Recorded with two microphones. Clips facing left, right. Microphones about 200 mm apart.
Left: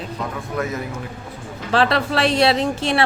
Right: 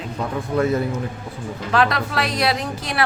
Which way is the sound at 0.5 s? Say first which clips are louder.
Right 6 dB; 30° right (ahead or behind).